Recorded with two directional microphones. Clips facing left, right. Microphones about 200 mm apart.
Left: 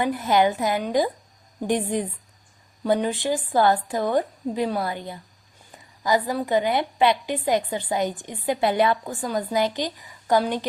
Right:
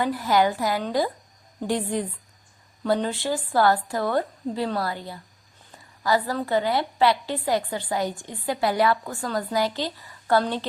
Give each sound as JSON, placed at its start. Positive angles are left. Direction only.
{"t": 0.0, "sound": "a woman's voice", "side_deg": 20}